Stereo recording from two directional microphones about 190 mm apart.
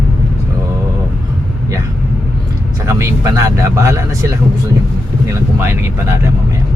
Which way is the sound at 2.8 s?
15° right (ahead or behind).